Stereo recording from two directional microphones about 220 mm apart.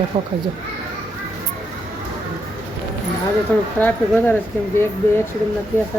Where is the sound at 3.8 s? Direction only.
10° left (ahead or behind).